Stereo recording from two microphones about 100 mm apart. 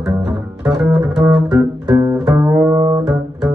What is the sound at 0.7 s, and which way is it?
Double bass, 10° right (ahead or behind).